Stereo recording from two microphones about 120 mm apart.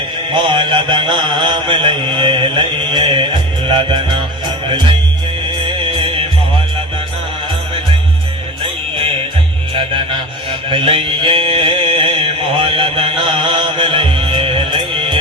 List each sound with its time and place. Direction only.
0.3 s mantra: 40° right (ahead or behind)
3.7 s music: 40° right (ahead or behind)
9.7 s music: 45° right (ahead or behind)
10.7 s mantra: 45° right (ahead or behind)